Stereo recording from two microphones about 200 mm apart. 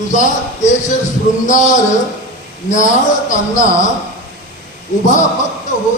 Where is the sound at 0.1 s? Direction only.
35° left (ahead or behind).